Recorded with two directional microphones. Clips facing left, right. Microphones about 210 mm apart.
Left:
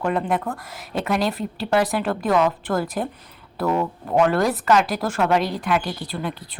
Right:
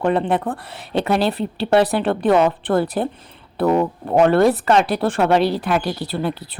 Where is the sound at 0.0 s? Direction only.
30° right (ahead or behind).